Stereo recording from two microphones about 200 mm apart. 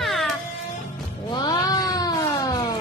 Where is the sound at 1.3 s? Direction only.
20° left (ahead or behind).